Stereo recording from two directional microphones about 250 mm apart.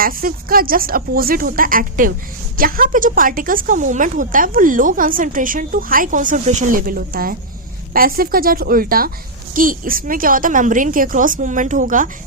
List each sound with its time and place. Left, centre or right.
0.0 s speech: right